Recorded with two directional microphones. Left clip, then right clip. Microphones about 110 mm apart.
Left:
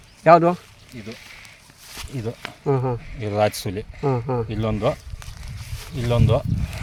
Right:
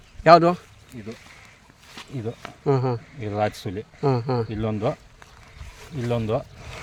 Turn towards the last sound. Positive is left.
turn(degrees=45)  # may be behind; listen again after turning